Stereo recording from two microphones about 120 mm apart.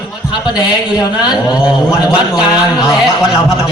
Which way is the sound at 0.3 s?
35° left (ahead or behind).